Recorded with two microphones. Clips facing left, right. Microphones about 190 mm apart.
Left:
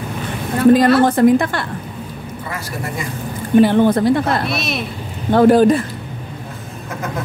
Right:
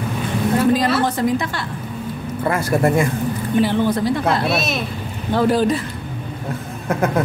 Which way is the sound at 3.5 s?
55° left (ahead or behind).